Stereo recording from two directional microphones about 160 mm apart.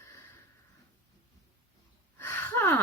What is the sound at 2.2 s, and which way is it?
Gasp, 15° left (ahead or behind).